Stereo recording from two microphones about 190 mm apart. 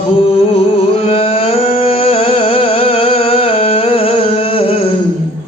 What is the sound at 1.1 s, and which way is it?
Music, 30° left (ahead or behind).